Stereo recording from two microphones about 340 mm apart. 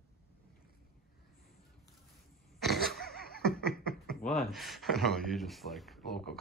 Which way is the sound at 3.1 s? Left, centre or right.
Left.